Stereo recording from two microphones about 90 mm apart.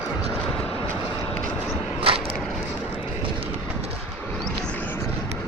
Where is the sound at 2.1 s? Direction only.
90° right.